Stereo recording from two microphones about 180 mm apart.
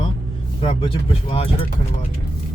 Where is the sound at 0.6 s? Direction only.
30° left (ahead or behind).